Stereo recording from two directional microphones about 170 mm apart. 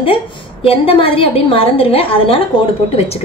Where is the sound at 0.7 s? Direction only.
30° left (ahead or behind).